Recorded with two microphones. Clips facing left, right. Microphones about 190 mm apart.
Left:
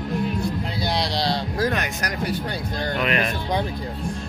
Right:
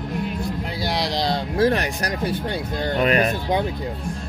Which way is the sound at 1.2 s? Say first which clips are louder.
Right 7 dB; 30° right (ahead or behind).